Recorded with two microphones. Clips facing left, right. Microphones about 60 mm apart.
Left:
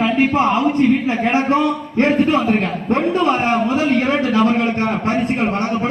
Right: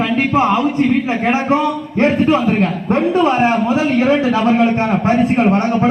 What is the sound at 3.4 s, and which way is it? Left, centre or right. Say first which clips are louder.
Speech: right 3 dB; centre.